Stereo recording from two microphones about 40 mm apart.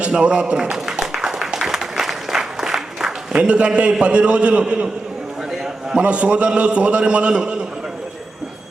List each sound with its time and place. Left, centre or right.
0.1 s a sound: right
3.3 s a man's voice: right
5.9 s a man's voice: right